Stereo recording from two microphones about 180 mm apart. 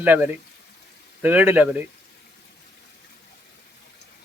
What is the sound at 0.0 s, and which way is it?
Speech, 10° right (ahead or behind).